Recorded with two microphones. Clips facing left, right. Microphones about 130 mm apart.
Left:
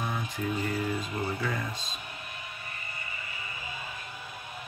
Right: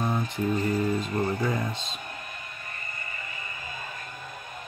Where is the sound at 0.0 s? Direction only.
35° right (ahead or behind).